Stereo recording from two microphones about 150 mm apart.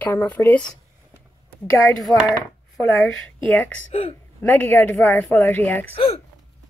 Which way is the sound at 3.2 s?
10° left (ahead or behind).